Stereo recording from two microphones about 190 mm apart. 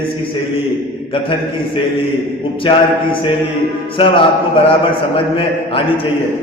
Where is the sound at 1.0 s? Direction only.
25° left (ahead or behind).